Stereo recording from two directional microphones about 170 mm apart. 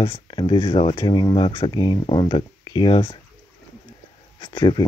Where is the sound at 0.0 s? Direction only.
30° left (ahead or behind).